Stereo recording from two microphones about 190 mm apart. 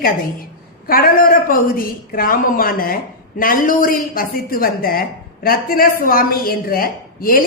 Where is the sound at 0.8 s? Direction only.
50° left (ahead or behind).